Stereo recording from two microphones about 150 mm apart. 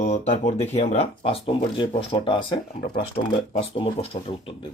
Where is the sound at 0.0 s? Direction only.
50° left (ahead or behind).